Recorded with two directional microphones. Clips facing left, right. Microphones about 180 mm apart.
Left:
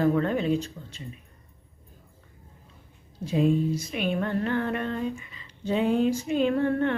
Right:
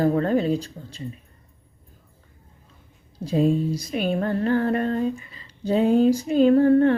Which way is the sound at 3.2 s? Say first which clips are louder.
Right 2 dB; 35° right (ahead or behind).